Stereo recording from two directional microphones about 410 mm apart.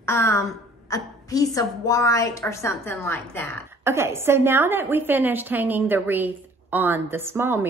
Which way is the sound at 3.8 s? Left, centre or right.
Centre.